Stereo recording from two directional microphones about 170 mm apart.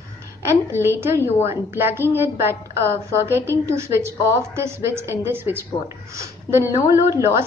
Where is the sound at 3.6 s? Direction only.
15° right (ahead or behind).